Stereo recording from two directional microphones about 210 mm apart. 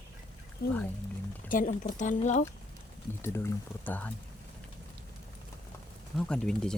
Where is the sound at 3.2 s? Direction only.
10° left (ahead or behind).